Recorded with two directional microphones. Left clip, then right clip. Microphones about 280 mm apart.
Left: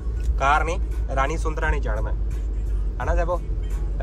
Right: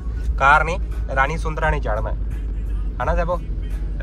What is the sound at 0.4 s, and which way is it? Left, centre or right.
Speech, centre.